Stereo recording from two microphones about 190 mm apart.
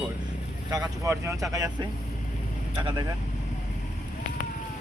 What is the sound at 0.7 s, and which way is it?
Speech, 20° right (ahead or behind).